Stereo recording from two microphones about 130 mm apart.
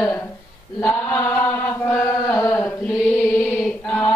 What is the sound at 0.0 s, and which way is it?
Speech, 20° left (ahead or behind).